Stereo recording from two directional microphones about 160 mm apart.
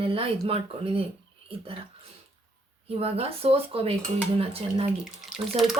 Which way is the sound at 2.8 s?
40° right (ahead or behind).